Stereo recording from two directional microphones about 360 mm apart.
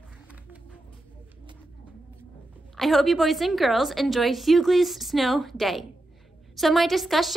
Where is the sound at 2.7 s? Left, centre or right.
Centre.